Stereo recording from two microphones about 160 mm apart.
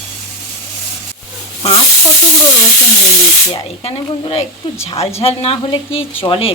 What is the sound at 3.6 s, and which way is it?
Speech, 35° left (ahead or behind).